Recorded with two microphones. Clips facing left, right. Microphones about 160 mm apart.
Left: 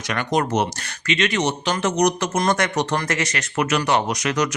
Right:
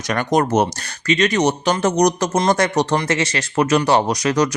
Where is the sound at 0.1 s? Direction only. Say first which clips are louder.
Right 4 dB; 45° right (ahead or behind).